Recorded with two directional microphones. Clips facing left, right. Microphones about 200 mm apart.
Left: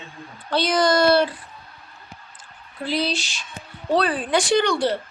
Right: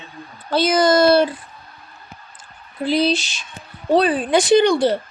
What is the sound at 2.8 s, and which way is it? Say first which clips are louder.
Speech: right 6 dB; 20° right (ahead or behind).